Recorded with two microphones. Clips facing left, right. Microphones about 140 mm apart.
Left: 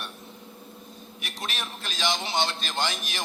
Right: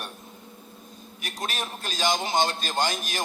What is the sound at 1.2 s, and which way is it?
A man's voice, 45° right (ahead or behind).